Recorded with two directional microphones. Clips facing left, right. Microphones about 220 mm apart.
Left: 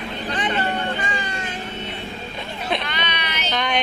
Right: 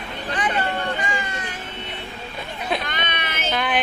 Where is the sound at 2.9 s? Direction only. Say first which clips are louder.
Even; 50° right (ahead or behind).